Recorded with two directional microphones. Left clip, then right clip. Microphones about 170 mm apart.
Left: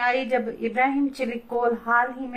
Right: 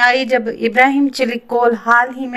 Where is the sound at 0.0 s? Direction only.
40° right (ahead or behind).